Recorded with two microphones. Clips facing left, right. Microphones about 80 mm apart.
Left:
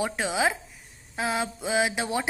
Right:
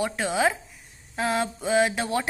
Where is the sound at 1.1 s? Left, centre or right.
Centre.